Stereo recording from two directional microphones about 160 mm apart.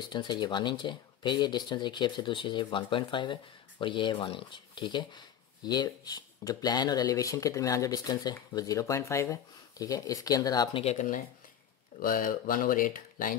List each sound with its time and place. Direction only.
0.1 s speech: 30° left (ahead or behind)
10.8 s speech: 45° left (ahead or behind)
12.0 s speech: 60° left (ahead or behind)